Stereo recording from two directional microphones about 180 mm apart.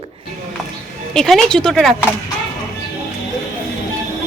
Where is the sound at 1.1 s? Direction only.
Centre (ahead or behind).